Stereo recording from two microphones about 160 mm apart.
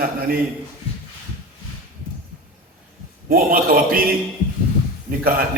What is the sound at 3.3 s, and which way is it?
Speech, 65° right (ahead or behind).